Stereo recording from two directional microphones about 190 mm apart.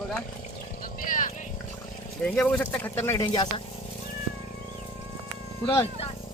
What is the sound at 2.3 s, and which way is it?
Speech, 5° left (ahead or behind).